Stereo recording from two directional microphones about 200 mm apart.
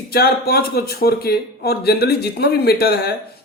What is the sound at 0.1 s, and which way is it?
Speech, 50° left (ahead or behind).